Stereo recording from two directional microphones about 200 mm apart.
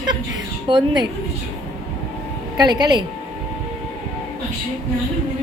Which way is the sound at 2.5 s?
20° right (ahead or behind).